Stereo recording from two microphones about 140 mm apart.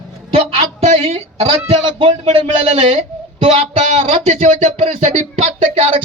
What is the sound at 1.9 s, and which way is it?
Speech, 40° right (ahead or behind).